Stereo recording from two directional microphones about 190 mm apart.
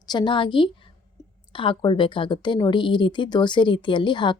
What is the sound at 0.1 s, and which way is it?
Speech, 25° left (ahead or behind).